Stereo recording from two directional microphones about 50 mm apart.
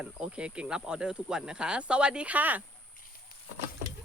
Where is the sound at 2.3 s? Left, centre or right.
Right.